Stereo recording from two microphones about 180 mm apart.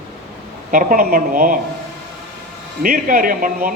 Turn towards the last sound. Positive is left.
turn(degrees=-50)  # may be behind; listen again after turning